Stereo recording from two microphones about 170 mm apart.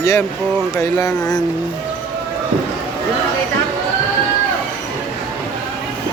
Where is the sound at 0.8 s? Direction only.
20° left (ahead or behind).